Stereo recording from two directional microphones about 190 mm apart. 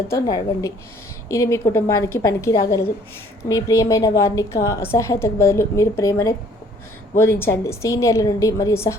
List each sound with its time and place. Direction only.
0.1 s a woman's voice: 15° left (ahead or behind)